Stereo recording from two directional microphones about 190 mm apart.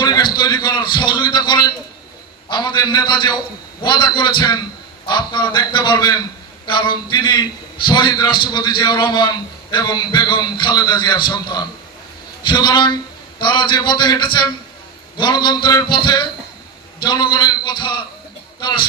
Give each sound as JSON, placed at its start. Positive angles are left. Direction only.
{"t": 0.0, "sound": "a man's voice", "side_deg": 20}